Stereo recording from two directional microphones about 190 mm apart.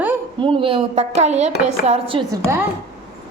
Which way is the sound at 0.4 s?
30° right (ahead or behind).